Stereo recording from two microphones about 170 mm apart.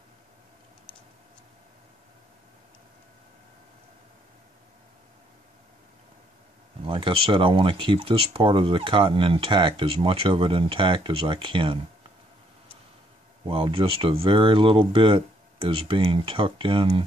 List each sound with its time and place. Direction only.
6.8 s speech: 30° right (ahead or behind)
13.5 s speech: 30° right (ahead or behind)